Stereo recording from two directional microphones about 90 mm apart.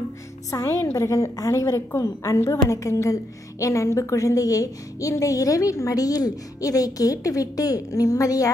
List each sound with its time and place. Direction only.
0.5 s a woman's voice: 35° left (ahead or behind)